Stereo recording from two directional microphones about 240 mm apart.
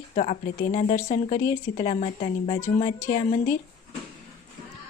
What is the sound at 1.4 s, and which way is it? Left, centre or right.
Speech, centre.